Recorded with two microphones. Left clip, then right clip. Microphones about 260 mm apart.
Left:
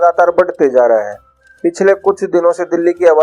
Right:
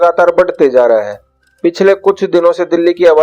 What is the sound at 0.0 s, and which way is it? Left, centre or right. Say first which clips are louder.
Speech: right 2 dB; right.